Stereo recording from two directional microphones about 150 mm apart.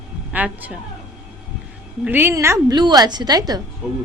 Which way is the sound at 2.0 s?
15° right (ahead or behind).